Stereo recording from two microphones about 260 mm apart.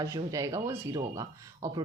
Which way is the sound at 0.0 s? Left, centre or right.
Centre.